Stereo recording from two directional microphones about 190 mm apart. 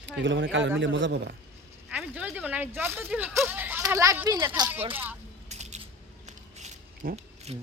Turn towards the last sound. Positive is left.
turn(degrees=-35)  # may be behind; listen again after turning